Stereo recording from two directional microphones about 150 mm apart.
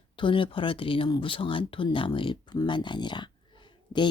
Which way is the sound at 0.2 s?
35° left (ahead or behind).